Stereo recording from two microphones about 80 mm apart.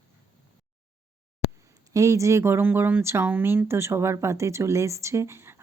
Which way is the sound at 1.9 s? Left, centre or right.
Right.